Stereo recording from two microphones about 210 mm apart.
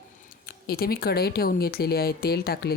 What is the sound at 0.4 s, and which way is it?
Speech, 45° left (ahead or behind).